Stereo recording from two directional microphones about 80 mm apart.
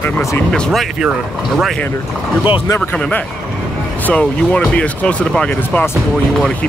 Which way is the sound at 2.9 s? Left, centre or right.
Centre.